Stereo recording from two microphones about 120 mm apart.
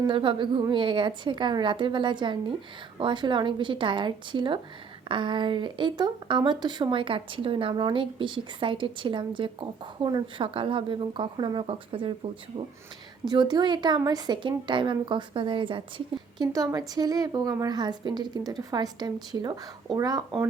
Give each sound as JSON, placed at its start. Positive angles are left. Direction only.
{"t": 0.1, "sound": "a woman's voice", "side_deg": -45}
{"t": 16.5, "sound": "a woman's voice", "side_deg": -30}